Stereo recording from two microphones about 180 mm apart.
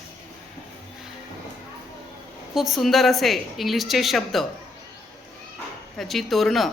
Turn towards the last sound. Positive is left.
turn(degrees=0)  # may be behind; listen again after turning